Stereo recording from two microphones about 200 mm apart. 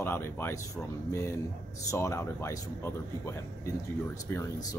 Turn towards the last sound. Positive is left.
turn(degrees=20)  # may be behind; listen again after turning